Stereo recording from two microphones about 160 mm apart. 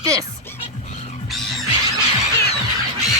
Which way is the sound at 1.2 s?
Centre (ahead or behind).